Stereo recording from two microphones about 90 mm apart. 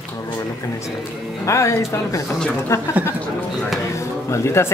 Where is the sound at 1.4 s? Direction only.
35° left (ahead or behind).